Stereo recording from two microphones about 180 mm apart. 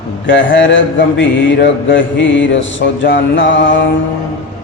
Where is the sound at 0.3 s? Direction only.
90° left.